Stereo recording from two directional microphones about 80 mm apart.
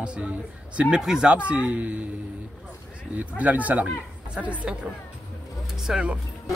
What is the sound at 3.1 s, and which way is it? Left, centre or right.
Speech, centre.